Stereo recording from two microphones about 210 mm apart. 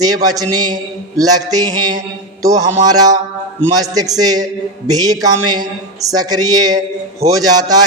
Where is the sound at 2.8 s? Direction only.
20° right (ahead or behind).